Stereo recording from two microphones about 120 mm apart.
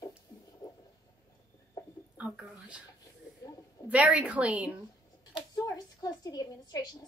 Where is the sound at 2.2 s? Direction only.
10° right (ahead or behind).